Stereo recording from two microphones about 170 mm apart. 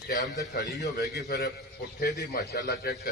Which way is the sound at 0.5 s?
75° left (ahead or behind).